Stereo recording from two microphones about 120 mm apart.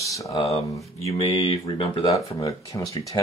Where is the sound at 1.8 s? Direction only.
45° left (ahead or behind).